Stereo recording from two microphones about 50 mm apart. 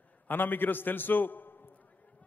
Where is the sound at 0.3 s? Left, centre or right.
Left.